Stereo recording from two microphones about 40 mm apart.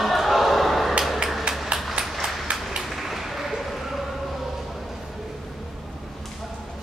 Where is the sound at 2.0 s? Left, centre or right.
Centre.